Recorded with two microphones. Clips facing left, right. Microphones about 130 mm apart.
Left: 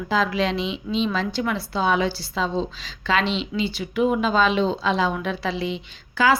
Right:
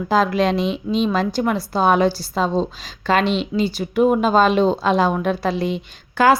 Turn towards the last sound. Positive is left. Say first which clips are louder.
# right 4 dB
turn(degrees=-50)  # may be behind; listen again after turning